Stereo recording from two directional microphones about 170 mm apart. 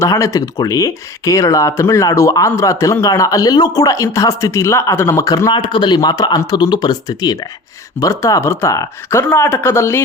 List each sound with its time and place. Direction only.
0.0 s speech: 20° left (ahead or behind)